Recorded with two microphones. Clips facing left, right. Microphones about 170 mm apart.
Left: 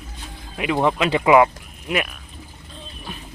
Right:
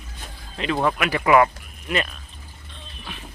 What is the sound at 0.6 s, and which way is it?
Speech, 15° left (ahead or behind).